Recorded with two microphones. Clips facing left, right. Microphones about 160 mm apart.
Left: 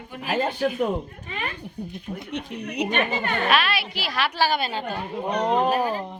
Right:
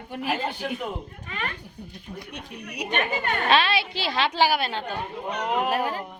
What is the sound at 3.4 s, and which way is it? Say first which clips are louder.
A woman's voice: right 3 dB; 25° right (ahead or behind).